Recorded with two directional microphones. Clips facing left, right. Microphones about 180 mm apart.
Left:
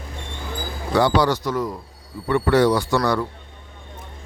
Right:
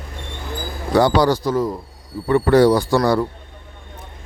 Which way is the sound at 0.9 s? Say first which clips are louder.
Right 3 dB; 40° right (ahead or behind).